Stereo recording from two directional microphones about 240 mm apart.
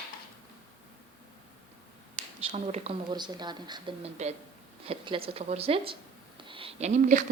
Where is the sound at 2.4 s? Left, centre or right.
Right.